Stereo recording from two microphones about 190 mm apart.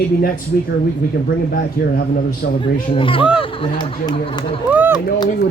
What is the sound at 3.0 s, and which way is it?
Speech, 25° left (ahead or behind).